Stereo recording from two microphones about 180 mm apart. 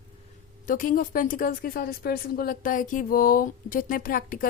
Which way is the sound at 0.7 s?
50° left (ahead or behind).